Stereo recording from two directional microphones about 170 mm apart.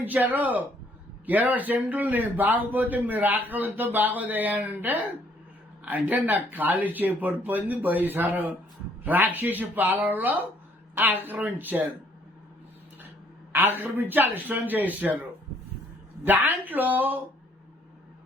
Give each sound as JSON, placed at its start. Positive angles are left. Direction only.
{"t": 0.0, "sound": "a man's voice", "side_deg": -10}
{"t": 6.1, "sound": "a man's voice", "side_deg": -10}
{"t": 13.5, "sound": "a man's voice", "side_deg": -10}
{"t": 16.2, "sound": "a man's voice", "side_deg": -10}